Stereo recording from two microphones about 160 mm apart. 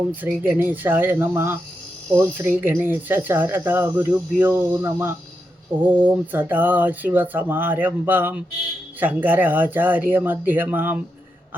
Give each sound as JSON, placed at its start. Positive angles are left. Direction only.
{"t": 0.1, "sound": "speech", "side_deg": -10}